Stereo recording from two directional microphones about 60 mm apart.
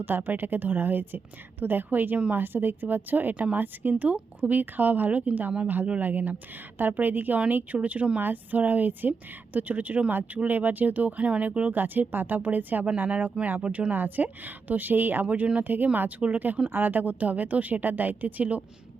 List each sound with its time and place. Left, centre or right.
0.0 s a woman's voice: right